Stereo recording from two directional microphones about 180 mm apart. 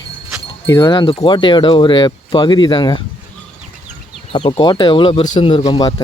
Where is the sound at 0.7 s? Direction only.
20° left (ahead or behind).